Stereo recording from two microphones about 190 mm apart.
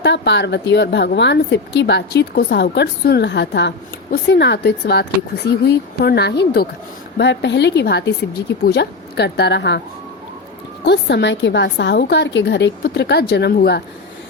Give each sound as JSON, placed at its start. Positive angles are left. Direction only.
{"t": 0.0, "sound": "a woman's voice", "side_deg": 70}
{"t": 10.8, "sound": "a woman's voice", "side_deg": 65}